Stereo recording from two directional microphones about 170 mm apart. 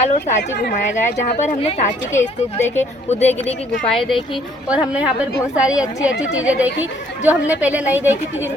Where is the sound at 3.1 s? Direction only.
40° left (ahead or behind).